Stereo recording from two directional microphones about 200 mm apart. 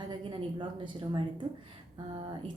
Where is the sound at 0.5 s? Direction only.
25° right (ahead or behind).